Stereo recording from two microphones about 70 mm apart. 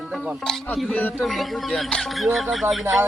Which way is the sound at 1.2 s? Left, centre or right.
Centre.